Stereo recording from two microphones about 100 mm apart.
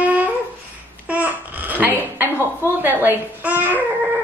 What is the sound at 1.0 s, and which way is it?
Babbling, 15° right (ahead or behind).